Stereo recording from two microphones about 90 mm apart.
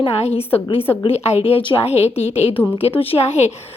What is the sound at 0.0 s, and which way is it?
A woman's voice, 90° left.